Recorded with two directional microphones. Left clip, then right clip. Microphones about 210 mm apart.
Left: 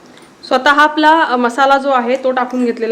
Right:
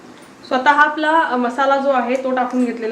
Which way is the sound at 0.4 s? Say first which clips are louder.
Left 3 dB; 50° left (ahead or behind).